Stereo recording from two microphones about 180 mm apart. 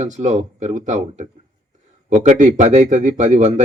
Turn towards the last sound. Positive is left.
turn(degrees=-40)  # may be behind; listen again after turning